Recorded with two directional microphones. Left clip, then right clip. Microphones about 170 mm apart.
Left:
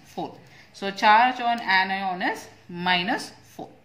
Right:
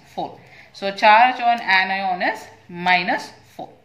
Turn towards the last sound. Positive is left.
turn(degrees=35)  # may be behind; listen again after turning